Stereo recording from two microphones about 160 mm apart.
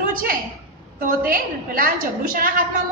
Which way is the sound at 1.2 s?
60° right (ahead or behind).